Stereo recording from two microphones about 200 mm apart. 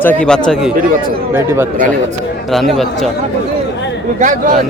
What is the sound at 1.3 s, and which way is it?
Speech, 10° right (ahead or behind).